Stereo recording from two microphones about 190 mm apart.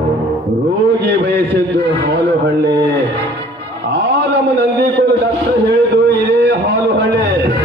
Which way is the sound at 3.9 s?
65° right (ahead or behind).